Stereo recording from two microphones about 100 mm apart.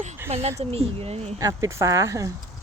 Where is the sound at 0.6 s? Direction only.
85° right.